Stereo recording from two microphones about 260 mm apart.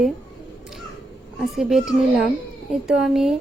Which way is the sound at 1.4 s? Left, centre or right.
Centre.